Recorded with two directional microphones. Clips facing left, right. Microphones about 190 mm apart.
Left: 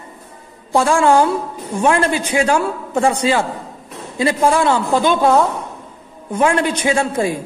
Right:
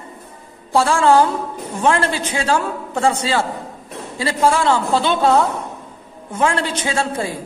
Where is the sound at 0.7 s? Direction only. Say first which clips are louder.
Left 1 dB; 15° left (ahead or behind).